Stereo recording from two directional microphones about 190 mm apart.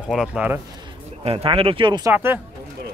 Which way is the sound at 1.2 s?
30° right (ahead or behind).